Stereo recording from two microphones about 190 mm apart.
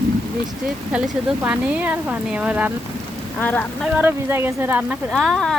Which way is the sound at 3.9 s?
10° right (ahead or behind).